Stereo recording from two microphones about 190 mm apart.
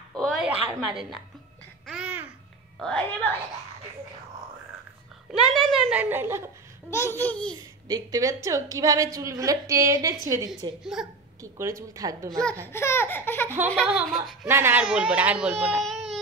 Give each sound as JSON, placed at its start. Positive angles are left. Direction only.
{"t": 0.2, "sound": "a sound", "side_deg": 0}
{"t": 0.8, "sound": "speech", "side_deg": 0}
{"t": 1.9, "sound": "babbling", "side_deg": -5}
{"t": 2.8, "sound": "speech", "side_deg": 5}
{"t": 5.3, "sound": "a woman's voice", "side_deg": 0}
{"t": 6.9, "sound": "speech", "side_deg": 15}
{"t": 7.9, "sound": "a woman's voice", "side_deg": -20}
{"t": 10.8, "sound": "speech", "side_deg": -5}
{"t": 11.4, "sound": "a woman's voice", "side_deg": -15}
{"t": 12.3, "sound": "speech", "side_deg": 5}
{"t": 13.8, "sound": "speech", "side_deg": 0}